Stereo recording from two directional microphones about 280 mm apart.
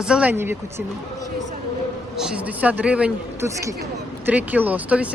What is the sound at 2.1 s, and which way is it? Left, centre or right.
Speech, centre.